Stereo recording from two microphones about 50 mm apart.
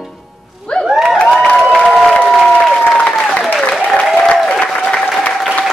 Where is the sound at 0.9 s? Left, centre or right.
Centre.